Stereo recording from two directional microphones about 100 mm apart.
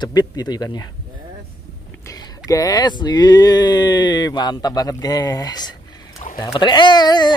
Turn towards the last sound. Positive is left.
turn(degrees=45)  # may be behind; listen again after turning